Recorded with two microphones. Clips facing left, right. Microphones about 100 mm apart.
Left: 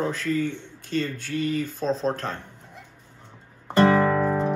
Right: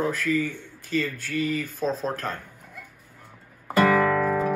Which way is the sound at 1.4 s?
55° right (ahead or behind).